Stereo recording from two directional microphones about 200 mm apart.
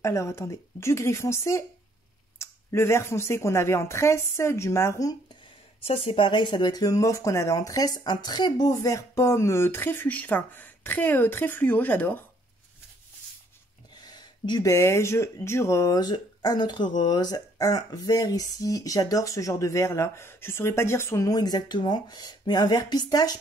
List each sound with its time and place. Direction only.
0.0 s speech: 15° left (ahead or behind)
5.9 s speech: 30° left (ahead or behind); by 12.2 s 10° left (ahead or behind)
14.0 s speech: 20° left (ahead or behind)